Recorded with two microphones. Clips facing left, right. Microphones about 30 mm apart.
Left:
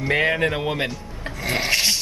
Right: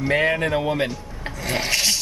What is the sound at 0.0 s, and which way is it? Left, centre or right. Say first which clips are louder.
Speech: even; centre.